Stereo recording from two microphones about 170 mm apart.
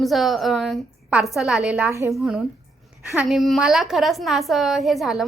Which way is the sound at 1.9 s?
20° right (ahead or behind).